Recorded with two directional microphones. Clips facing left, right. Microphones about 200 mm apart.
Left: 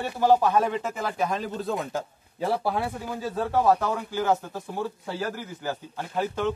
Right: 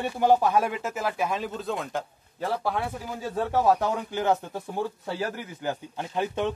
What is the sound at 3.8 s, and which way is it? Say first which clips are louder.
Speech: even; 20° right (ahead or behind).